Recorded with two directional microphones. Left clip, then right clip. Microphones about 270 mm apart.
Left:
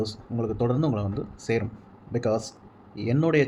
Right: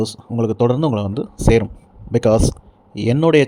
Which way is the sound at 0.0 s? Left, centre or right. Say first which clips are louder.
Right 9 dB; right.